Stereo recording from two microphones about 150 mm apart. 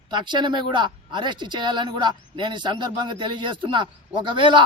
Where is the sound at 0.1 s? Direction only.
30° right (ahead or behind).